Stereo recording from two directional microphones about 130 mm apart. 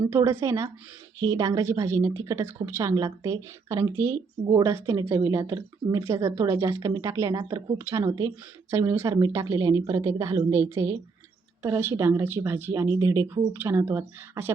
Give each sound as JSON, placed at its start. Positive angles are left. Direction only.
{"t": 0.1, "sound": "speech", "side_deg": -20}